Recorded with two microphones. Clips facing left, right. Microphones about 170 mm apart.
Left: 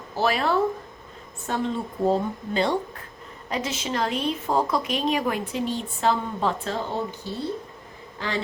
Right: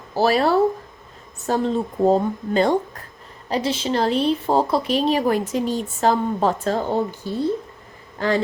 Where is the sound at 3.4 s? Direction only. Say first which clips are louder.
Right 6 dB; 30° right (ahead or behind).